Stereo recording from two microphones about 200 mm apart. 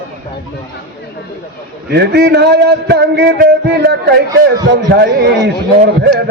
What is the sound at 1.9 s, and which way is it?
A man's voice, 55° right (ahead or behind).